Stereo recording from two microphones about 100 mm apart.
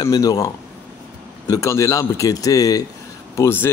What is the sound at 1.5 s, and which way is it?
Speech, 35° left (ahead or behind).